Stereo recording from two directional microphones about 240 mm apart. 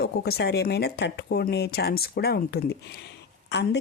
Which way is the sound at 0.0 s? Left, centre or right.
Left.